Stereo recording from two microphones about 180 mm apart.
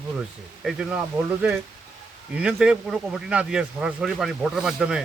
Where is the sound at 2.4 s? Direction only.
5° right (ahead or behind).